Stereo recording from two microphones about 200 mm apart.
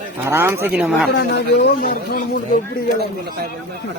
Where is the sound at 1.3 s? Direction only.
50° left (ahead or behind).